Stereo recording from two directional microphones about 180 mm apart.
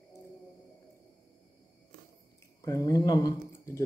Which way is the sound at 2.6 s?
20° left (ahead or behind).